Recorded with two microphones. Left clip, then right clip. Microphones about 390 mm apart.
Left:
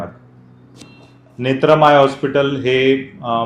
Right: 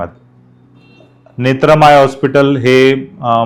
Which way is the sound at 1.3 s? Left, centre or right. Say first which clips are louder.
Right 4 dB; right.